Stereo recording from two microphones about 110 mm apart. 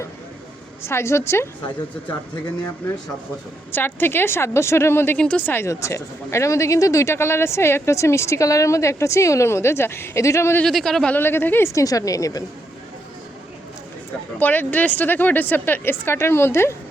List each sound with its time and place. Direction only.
0.9 s speech: 25° left (ahead or behind)
3.7 s speech: 20° left (ahead or behind)
10.6 s speech: centre (ahead or behind)
11.1 s speech: 20° left (ahead or behind)
14.3 s speech: 15° left (ahead or behind)